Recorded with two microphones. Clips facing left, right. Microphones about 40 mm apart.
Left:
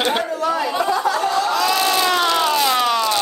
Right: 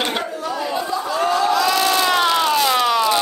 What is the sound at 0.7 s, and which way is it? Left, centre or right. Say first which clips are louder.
Chatter: left 4 dB; left.